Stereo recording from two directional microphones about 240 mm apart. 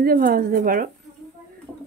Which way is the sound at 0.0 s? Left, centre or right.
Right.